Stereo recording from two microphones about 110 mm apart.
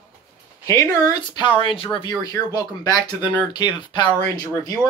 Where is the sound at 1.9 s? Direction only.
35° left (ahead or behind).